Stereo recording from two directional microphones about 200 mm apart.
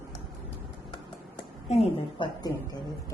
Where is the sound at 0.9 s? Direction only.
25° left (ahead or behind).